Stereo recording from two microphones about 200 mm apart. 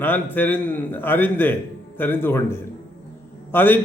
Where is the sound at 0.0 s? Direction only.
10° left (ahead or behind).